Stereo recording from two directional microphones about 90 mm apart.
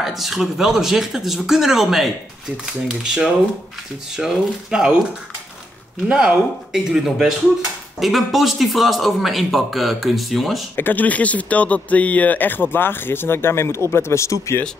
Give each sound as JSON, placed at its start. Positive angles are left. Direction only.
{"t": 0.0, "sound": "a man's voice", "side_deg": 0}
{"t": 6.0, "sound": "a man's voice", "side_deg": -10}
{"t": 10.8, "sound": "speech", "side_deg": 20}